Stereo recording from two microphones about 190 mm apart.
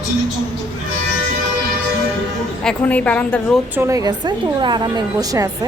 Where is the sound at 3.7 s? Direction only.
15° right (ahead or behind).